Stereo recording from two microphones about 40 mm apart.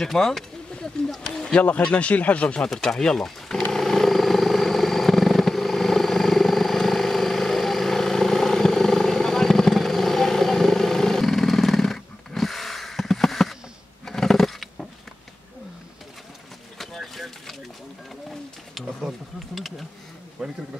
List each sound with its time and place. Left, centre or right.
0.0 s speech: centre
1.0 s a sound: centre
1.5 s speech: left
2.7 s speech: centre
3.7 s vehicle: centre
14.0 s a sound: centre
16.7 s vehicle: centre
18.8 s bee: centre
20.4 s bee: centre